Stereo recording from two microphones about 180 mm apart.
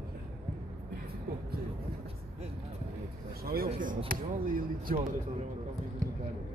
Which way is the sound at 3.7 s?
50° right (ahead or behind).